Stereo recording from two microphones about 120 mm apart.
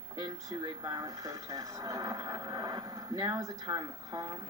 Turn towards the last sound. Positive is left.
turn(degrees=-30)  # may be behind; listen again after turning